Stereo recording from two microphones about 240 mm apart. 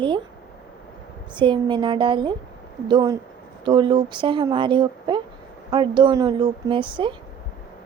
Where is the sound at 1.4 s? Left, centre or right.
Centre.